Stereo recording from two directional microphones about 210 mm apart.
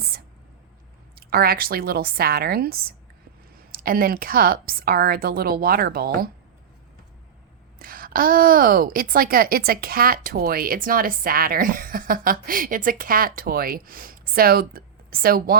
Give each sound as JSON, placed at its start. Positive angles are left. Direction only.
{"t": 1.1, "sound": "a woman's voice", "side_deg": -45}
{"t": 7.8, "sound": "a woman's voice", "side_deg": -45}